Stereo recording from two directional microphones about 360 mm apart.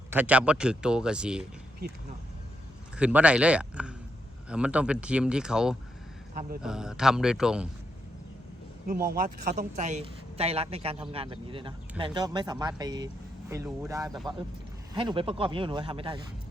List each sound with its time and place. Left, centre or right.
0.1 s speech: centre
2.9 s speech: centre
8.9 s speech: right